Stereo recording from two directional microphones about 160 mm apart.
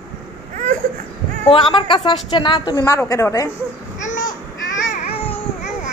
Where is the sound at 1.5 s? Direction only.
30° left (ahead or behind).